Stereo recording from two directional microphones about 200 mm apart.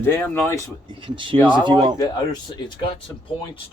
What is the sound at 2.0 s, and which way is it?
Speech, 20° left (ahead or behind).